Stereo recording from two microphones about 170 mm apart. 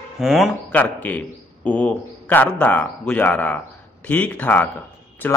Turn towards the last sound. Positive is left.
turn(degrees=10)  # may be behind; listen again after turning